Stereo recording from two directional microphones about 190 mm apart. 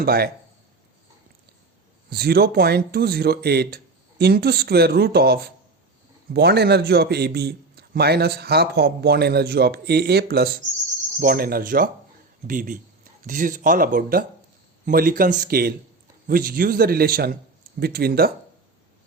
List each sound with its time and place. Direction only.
0.0 s a man's voice: 55° right (ahead or behind)
2.0 s a man's voice: 55° right (ahead or behind)